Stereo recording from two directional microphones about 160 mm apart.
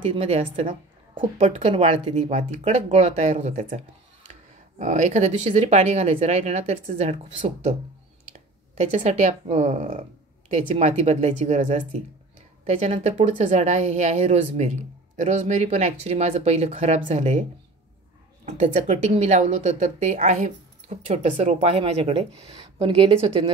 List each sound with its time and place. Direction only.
0.1 s speech: 35° right (ahead or behind)
8.7 s speech: 45° right (ahead or behind)